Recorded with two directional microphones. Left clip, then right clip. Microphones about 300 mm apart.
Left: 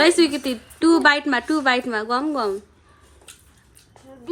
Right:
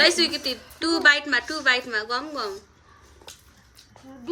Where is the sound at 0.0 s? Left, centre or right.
Centre.